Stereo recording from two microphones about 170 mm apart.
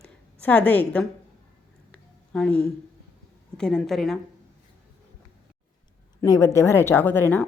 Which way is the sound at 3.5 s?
5° left (ahead or behind).